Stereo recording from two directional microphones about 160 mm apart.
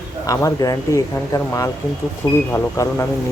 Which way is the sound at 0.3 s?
20° left (ahead or behind).